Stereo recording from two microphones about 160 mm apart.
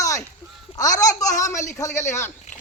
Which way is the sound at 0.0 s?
20° left (ahead or behind).